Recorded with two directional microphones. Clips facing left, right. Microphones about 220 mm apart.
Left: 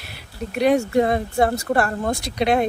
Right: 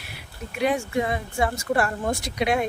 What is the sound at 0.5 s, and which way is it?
Speech, 65° left (ahead or behind).